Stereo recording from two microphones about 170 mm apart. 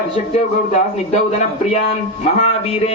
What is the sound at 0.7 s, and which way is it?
Speech, 40° left (ahead or behind).